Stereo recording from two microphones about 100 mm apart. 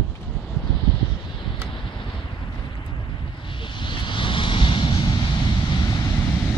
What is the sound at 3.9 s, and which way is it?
Vehicle, 55° left (ahead or behind).